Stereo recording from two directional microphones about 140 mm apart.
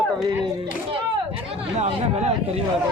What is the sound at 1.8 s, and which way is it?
Speech, 50° right (ahead or behind).